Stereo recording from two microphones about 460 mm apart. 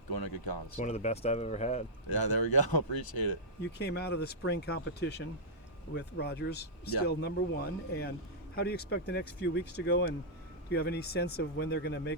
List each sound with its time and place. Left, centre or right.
0.1 s speech: left
0.8 s speech: centre
2.0 s speech: left
3.7 s speech: left